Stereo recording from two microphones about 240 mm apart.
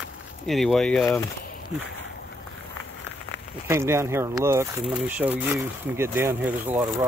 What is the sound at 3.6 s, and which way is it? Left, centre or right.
Speech, centre.